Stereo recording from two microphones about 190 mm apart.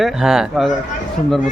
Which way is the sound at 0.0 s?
Centre (ahead or behind).